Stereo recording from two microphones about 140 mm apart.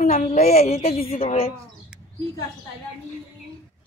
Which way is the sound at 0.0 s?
75° left (ahead or behind).